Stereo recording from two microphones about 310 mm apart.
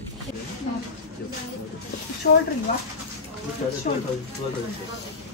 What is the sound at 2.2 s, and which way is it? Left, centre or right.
Speech, left.